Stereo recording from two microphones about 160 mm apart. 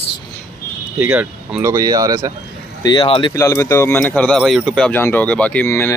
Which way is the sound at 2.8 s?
25° left (ahead or behind).